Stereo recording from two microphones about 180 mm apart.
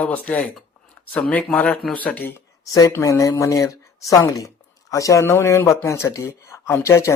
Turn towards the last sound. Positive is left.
turn(degrees=15)  # may be behind; listen again after turning